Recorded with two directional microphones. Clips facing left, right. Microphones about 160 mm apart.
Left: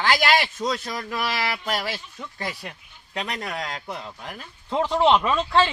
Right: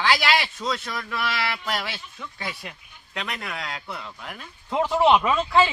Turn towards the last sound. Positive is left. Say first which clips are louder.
# even
turn(degrees=-5)  # may be behind; listen again after turning